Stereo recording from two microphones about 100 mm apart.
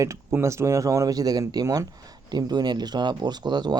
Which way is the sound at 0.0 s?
30° right (ahead or behind).